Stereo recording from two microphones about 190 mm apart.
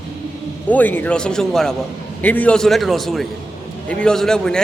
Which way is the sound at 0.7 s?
10° left (ahead or behind).